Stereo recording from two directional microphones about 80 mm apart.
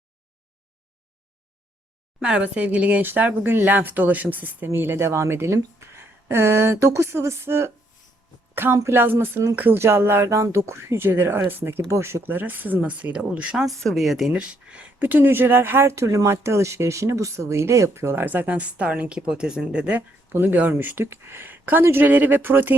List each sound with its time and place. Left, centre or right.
2.2 s speech: centre; by 7.7 s right
8.5 s a sound: right
10.7 s speech: right; by 13.7 s centre
13.8 s speech: centre
14.3 s speech: centre
15.0 s speech: right